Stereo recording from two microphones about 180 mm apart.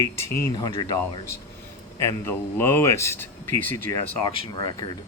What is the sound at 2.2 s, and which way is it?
Speech, 15° left (ahead or behind).